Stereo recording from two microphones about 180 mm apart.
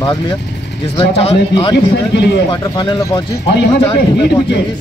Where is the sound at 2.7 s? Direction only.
25° left (ahead or behind).